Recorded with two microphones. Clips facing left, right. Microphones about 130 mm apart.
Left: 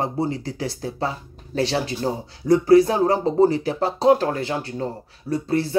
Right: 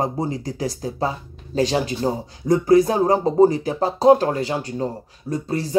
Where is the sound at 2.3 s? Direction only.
45° right (ahead or behind).